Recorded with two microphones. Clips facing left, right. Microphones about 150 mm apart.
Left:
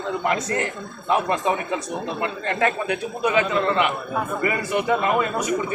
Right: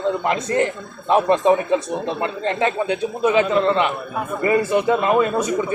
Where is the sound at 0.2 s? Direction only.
25° right (ahead or behind).